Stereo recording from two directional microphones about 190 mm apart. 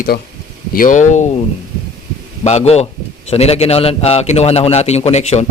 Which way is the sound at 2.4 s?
35° left (ahead or behind).